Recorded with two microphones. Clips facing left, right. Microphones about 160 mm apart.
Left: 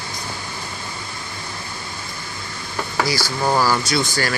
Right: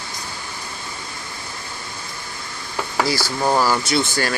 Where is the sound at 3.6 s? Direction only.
20° right (ahead or behind).